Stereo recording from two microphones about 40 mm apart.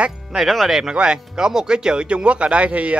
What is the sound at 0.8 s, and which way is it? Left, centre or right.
Speech, right.